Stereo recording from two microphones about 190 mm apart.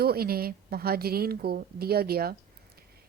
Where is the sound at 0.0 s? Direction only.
55° right (ahead or behind).